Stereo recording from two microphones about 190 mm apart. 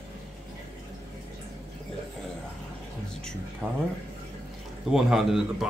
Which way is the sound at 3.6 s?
5° right (ahead or behind).